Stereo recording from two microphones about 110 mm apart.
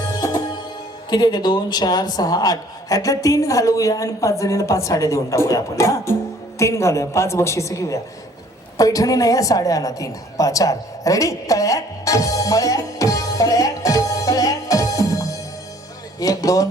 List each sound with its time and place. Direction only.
0.2 s music: 40° left (ahead or behind)
1.1 s a woman's voice: 40° left (ahead or behind)